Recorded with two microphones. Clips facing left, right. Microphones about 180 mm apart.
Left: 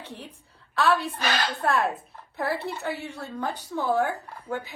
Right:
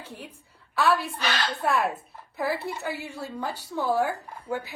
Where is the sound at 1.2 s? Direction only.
45° left (ahead or behind).